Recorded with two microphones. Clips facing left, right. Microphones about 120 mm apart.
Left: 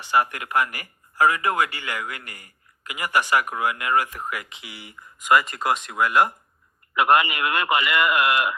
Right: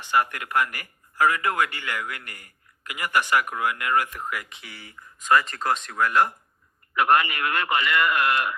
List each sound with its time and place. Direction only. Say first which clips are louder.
0.0 s a man's voice: left 2 dB; 15° left (ahead or behind)